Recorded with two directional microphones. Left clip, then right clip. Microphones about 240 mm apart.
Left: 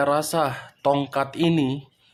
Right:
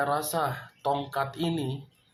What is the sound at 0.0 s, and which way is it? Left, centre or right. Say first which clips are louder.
Speech: left 6 dB; left.